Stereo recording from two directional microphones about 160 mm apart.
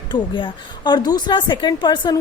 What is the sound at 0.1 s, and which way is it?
A woman's voice, 30° left (ahead or behind).